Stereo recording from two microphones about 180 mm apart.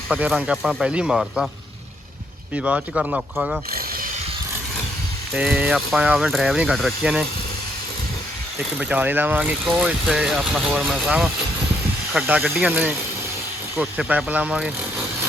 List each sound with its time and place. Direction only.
0.1 s speech: 10° right (ahead or behind)
2.6 s speech: 5° right (ahead or behind)
3.7 s mechanisms: 55° right (ahead or behind)
5.3 s speech: 5° right (ahead or behind)
8.8 s speech: 10° right (ahead or behind)